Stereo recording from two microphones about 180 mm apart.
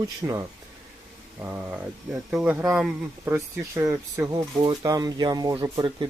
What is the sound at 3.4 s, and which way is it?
Speech, 15° right (ahead or behind).